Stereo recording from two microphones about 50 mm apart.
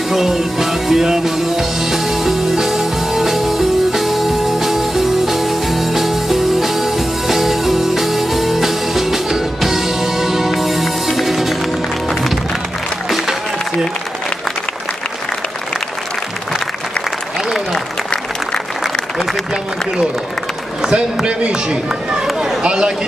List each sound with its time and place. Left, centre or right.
0.1 s music: centre
17.7 s applause: centre
20.8 s speech: centre